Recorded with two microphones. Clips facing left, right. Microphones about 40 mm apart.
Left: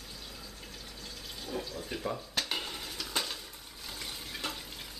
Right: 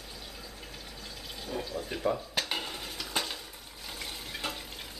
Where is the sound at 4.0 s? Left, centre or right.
Centre.